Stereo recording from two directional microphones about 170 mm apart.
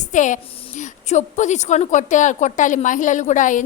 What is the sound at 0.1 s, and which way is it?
A woman's voice, 45° left (ahead or behind).